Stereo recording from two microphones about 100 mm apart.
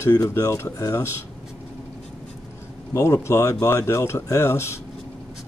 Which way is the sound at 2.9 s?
30° left (ahead or behind).